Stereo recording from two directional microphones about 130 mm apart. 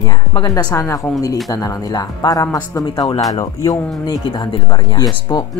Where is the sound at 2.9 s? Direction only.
40° left (ahead or behind).